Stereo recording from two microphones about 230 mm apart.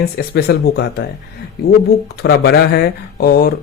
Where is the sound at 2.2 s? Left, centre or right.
Left.